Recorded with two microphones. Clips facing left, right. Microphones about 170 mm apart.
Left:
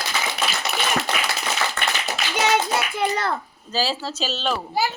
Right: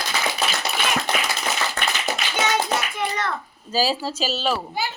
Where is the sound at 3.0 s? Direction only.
35° left (ahead or behind).